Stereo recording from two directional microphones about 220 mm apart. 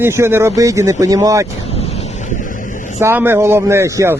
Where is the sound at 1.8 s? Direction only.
30° left (ahead or behind).